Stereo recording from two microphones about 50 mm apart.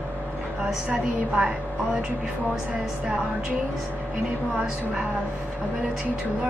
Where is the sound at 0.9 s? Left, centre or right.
Centre.